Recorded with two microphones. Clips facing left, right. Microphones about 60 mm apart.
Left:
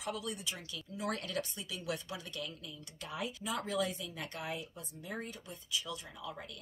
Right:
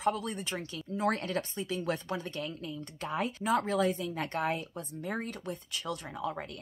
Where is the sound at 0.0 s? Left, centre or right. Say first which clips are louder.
Right 8 dB; right.